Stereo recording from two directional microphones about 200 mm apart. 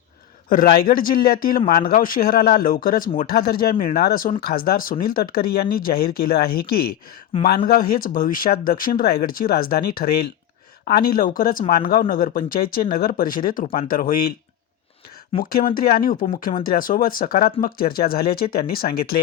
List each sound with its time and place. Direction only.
0.4 s speech: 45° left (ahead or behind)
7.3 s speech: 30° left (ahead or behind)
7.7 s speech: 45° left (ahead or behind)
15.4 s speech: 45° left (ahead or behind)